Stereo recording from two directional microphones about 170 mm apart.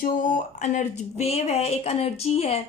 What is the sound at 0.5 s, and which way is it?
A woman's voice, 45° left (ahead or behind).